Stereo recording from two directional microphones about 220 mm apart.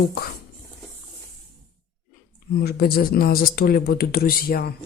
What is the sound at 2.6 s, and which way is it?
Speech, 45° left (ahead or behind).